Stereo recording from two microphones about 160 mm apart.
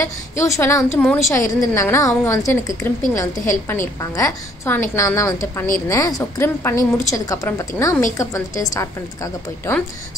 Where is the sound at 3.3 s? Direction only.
55° left (ahead or behind).